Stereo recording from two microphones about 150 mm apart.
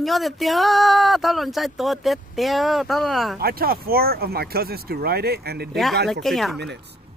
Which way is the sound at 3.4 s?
90° right.